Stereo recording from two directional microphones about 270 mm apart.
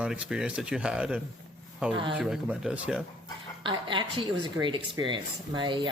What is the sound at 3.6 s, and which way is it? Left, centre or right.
Speech, centre.